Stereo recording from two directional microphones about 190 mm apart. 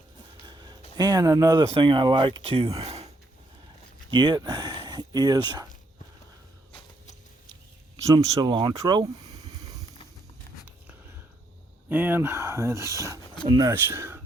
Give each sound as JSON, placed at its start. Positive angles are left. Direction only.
{"t": 0.4, "sound": "a sound", "side_deg": -20}
{"t": 0.9, "sound": "speech", "side_deg": -20}
{"t": 4.1, "sound": "speech", "side_deg": -25}
{"t": 8.0, "sound": "speech", "side_deg": -20}
{"t": 11.9, "sound": "speech", "side_deg": -10}